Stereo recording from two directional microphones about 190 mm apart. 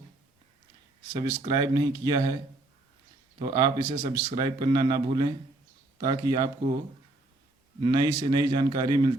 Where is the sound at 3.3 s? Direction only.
20° right (ahead or behind).